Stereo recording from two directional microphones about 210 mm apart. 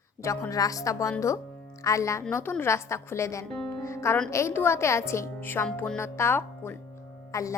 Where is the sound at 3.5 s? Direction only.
5° left (ahead or behind).